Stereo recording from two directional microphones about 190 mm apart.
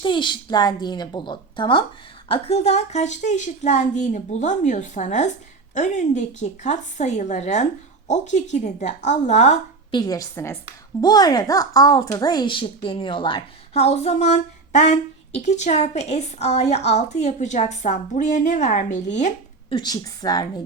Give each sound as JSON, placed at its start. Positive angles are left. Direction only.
{"t": 0.0, "sound": "a woman's voice", "side_deg": 25}
{"t": 9.9, "sound": "a woman's voice", "side_deg": 20}
{"t": 19.7, "sound": "speech", "side_deg": 20}